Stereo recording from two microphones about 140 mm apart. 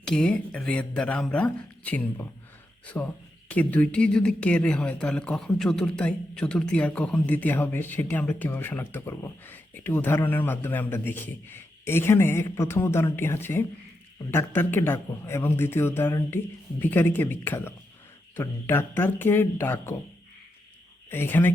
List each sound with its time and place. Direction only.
0.0 s speech: 5° left (ahead or behind)
21.1 s speech: 15° left (ahead or behind)